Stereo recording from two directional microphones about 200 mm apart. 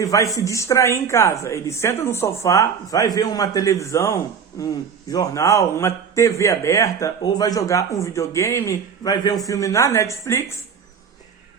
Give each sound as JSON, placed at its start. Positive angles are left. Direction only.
{"t": 0.0, "sound": "a man's voice", "side_deg": 15}